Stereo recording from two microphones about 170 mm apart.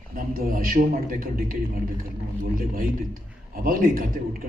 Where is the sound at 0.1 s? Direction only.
55° right (ahead or behind).